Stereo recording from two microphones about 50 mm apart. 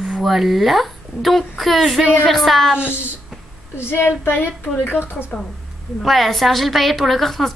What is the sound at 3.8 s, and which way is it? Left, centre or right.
Speech, left.